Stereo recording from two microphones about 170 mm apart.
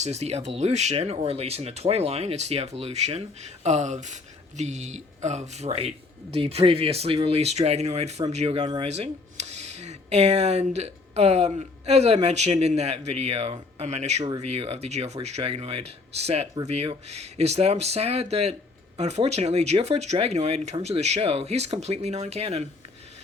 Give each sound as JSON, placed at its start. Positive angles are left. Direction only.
{"t": 0.0, "sound": "speech", "side_deg": -40}
{"t": 8.9, "sound": "speech", "side_deg": -40}